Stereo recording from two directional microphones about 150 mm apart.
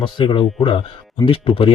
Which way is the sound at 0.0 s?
35° left (ahead or behind).